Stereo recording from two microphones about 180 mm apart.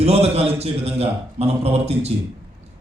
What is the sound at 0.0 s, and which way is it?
A man's voice, 35° right (ahead or behind).